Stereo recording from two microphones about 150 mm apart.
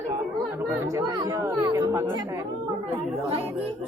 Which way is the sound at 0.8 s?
25° right (ahead or behind).